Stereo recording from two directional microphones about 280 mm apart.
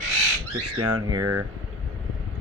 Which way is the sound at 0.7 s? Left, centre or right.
Right.